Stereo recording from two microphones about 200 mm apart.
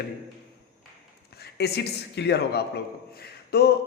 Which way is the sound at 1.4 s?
55° left (ahead or behind).